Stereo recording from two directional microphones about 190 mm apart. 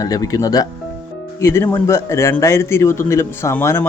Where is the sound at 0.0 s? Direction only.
20° left (ahead or behind).